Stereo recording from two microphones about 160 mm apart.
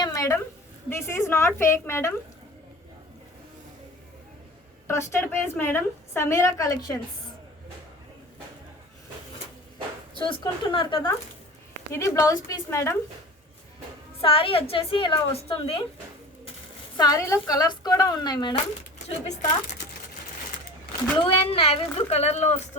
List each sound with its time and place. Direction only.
0.0 s a sound: 20° left (ahead or behind)
0.9 s a woman's voice: 15° left (ahead or behind)
4.9 s a woman's voice: 15° left (ahead or behind)
10.2 s a woman's voice: 30° left (ahead or behind)
11.9 s a woman's voice: 20° left (ahead or behind)
14.2 s a woman's voice: 35° left (ahead or behind)
17.0 s a woman's voice: 20° left (ahead or behind)
19.0 s speech: 45° left (ahead or behind)
21.2 s a woman's voice: 35° left (ahead or behind)